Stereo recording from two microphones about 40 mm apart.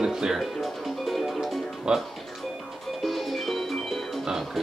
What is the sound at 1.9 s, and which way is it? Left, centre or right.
Speech, centre.